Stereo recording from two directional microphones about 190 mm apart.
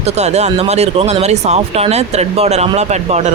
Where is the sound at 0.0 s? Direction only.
35° right (ahead or behind).